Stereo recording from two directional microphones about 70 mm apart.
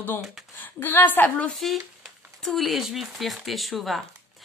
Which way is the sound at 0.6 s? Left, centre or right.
Left.